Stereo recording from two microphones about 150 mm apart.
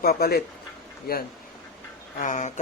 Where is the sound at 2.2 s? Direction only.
55° left (ahead or behind).